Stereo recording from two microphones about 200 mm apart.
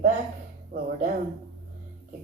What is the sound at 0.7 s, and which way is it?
Speech, 45° right (ahead or behind).